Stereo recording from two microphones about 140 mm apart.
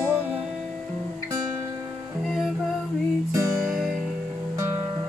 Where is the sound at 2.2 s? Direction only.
5° left (ahead or behind).